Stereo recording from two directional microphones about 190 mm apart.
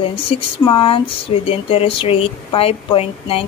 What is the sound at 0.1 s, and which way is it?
Speech, 30° left (ahead or behind).